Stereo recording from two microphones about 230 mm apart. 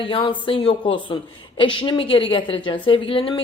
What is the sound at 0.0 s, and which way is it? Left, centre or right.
Speech, left.